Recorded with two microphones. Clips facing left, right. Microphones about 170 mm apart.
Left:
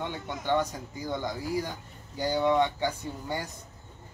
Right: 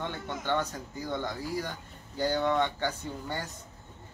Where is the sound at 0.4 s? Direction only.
15° left (ahead or behind).